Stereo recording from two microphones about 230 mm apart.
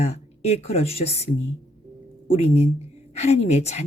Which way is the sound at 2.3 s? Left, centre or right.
Left.